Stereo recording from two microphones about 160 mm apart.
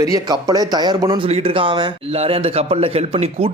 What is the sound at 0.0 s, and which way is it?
A man's voice, 20° right (ahead or behind).